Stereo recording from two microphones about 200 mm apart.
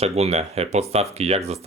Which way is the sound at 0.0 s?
30° right (ahead or behind).